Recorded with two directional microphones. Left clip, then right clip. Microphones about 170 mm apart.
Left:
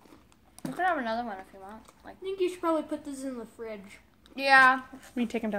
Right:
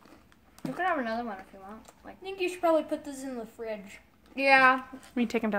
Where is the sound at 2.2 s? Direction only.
40° right (ahead or behind).